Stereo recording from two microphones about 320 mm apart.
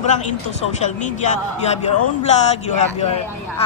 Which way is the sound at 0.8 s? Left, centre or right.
Left.